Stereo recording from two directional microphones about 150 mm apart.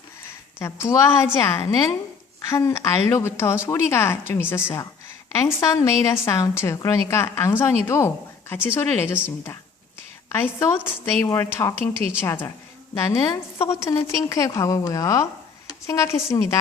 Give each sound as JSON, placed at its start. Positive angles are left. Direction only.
{"t": 0.6, "sound": "a woman's voice", "side_deg": 20}
{"t": 10.6, "sound": "a woman's voice", "side_deg": 15}